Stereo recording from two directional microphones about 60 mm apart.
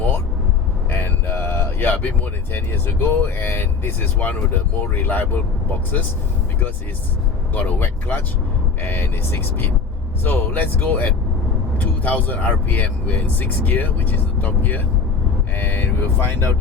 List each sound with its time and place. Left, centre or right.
0.9 s a sound: left
2.5 s speech: left
7.5 s speech: left